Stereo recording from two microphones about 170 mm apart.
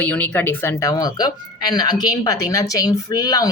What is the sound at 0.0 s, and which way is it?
Speech, 10° left (ahead or behind).